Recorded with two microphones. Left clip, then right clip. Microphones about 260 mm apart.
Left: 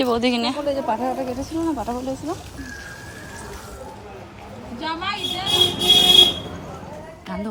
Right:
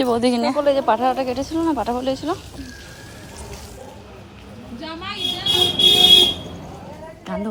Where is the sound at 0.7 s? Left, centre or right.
Right.